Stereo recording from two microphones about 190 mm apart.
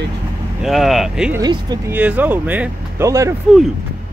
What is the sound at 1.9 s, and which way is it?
Speech, 10° right (ahead or behind).